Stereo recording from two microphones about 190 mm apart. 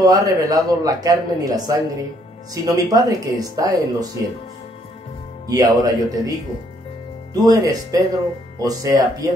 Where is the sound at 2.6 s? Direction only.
20° right (ahead or behind).